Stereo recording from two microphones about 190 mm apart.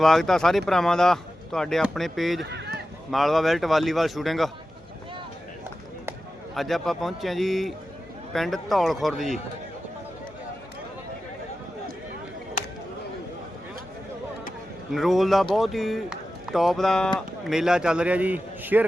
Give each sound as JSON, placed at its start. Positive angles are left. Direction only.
{"t": 0.0, "sound": "speech", "side_deg": 0}
{"t": 2.4, "sound": "a sound", "side_deg": -60}
{"t": 3.1, "sound": "speech", "side_deg": 0}
{"t": 6.5, "sound": "speech", "side_deg": 0}
{"t": 14.9, "sound": "speech", "side_deg": 0}